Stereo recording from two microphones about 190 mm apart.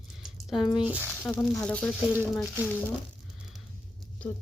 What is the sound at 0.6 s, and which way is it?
Speech, 25° left (ahead or behind).